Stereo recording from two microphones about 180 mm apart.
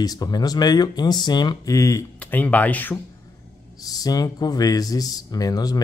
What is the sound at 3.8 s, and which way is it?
Speech, 20° left (ahead or behind).